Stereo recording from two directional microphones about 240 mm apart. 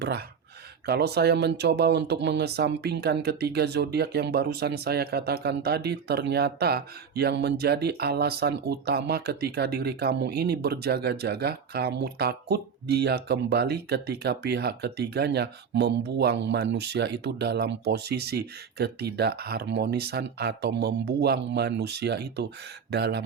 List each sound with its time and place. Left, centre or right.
0.0 s speech: right